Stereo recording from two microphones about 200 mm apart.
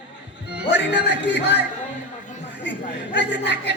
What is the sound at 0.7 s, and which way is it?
Speech, 60° left (ahead or behind).